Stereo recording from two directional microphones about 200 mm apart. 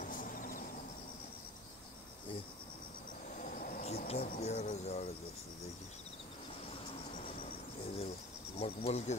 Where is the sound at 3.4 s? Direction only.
45° left (ahead or behind).